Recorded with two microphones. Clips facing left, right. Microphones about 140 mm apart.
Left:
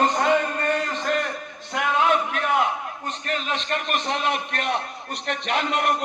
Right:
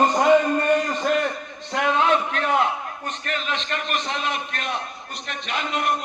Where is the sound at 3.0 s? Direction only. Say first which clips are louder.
Left 1 dB; 35° left (ahead or behind).